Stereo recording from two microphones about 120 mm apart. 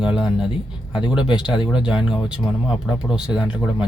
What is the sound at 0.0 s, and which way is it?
Speech, 5° right (ahead or behind).